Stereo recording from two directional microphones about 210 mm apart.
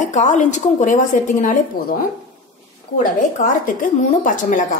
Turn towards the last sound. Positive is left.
turn(degrees=40)  # may be behind; listen again after turning